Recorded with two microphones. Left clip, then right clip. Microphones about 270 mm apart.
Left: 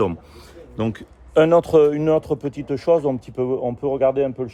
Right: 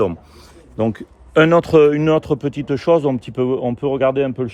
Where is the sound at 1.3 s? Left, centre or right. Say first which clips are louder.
Right 2 dB; right.